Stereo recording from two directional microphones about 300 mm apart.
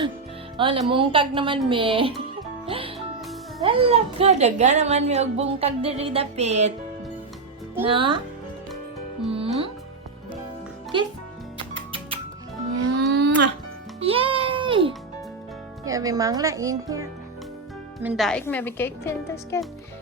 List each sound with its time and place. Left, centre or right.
0.5 s speech: centre
2.6 s music: centre
3.6 s a woman's voice: centre
7.9 s speech: centre
9.3 s music: centre
11.5 s music: centre
12.9 s a sound: right
14.0 s music: centre
15.8 s a woman's voice: centre